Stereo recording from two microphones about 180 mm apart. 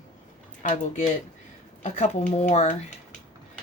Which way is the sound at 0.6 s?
45° left (ahead or behind).